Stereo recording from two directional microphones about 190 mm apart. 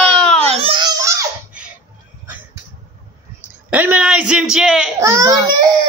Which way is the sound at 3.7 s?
10° right (ahead or behind).